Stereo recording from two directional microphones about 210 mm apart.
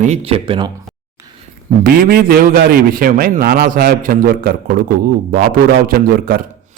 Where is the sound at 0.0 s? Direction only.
30° right (ahead or behind).